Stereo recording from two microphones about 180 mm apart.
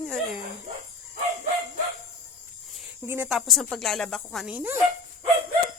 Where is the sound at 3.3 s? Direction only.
Centre (ahead or behind).